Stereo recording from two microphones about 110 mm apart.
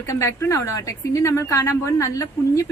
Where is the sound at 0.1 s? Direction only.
25° left (ahead or behind).